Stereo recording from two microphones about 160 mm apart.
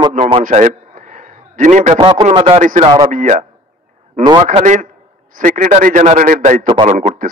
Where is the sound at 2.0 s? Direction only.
35° right (ahead or behind).